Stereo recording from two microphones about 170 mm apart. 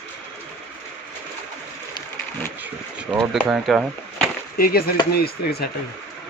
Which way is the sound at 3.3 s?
Centre (ahead or behind).